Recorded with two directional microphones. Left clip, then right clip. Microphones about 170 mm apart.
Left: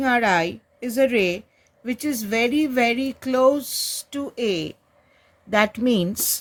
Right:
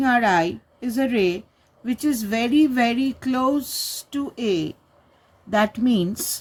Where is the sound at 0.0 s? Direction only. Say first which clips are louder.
Right 1 dB; 25° left (ahead or behind).